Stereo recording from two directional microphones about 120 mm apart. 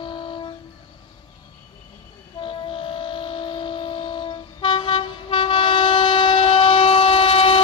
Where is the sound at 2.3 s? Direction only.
45° left (ahead or behind).